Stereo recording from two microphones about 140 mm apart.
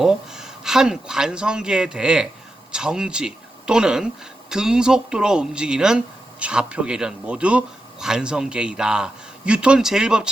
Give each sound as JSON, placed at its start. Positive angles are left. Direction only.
{"t": 0.0, "sound": "a man's voice", "side_deg": -5}